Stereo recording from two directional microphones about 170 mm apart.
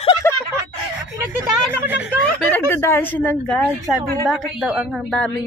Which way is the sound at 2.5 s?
15° left (ahead or behind).